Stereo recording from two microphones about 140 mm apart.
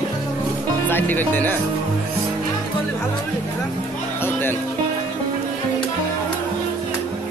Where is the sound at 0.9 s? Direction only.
15° left (ahead or behind).